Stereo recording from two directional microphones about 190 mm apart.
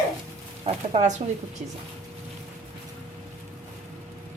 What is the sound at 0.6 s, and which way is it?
Speech, 35° right (ahead or behind).